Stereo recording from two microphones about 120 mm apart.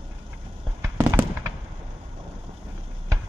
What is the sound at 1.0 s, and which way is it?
Fireworks, 15° right (ahead or behind).